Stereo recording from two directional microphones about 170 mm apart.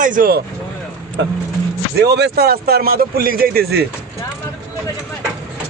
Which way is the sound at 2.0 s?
75° right (ahead or behind).